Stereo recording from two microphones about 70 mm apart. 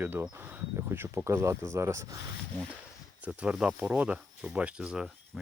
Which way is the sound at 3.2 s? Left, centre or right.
Centre.